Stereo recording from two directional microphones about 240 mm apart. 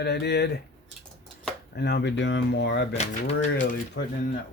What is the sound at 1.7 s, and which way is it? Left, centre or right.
Speech, left.